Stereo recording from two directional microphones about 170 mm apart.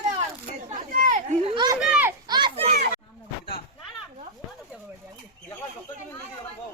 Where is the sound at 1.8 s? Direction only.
5° right (ahead or behind).